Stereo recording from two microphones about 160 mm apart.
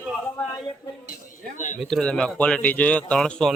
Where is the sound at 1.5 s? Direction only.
50° left (ahead or behind).